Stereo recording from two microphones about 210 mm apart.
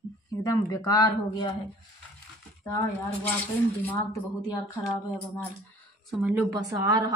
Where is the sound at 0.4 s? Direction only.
15° left (ahead or behind).